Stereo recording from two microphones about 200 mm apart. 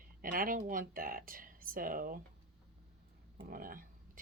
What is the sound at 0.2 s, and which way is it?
Speech, 45° right (ahead or behind).